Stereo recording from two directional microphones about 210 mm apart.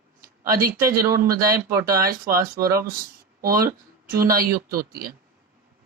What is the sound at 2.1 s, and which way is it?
Speech, 45° right (ahead or behind).